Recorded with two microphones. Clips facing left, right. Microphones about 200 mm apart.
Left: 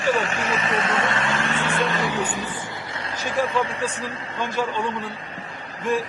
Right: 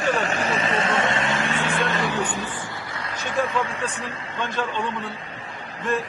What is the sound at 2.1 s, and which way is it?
Speech, 10° left (ahead or behind).